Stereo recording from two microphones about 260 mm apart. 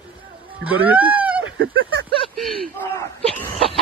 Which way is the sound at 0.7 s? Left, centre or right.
Centre.